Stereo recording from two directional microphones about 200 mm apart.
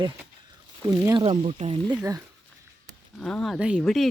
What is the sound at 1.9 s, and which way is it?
Speech, 20° right (ahead or behind).